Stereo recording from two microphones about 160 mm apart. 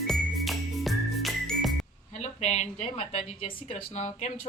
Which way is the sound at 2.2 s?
45° left (ahead or behind).